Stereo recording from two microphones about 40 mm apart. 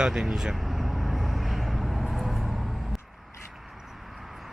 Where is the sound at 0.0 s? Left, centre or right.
Centre.